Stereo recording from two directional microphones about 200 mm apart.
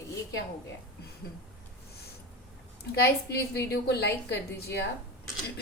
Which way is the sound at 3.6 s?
55° left (ahead or behind).